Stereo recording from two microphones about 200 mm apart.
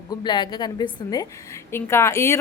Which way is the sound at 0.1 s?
20° left (ahead or behind).